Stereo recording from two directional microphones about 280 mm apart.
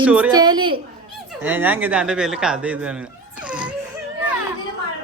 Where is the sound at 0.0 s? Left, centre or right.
Centre.